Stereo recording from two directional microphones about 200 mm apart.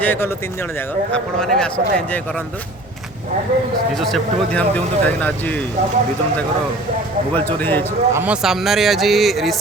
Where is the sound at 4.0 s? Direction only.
5° left (ahead or behind).